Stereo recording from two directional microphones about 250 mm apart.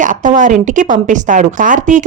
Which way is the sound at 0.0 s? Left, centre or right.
Right.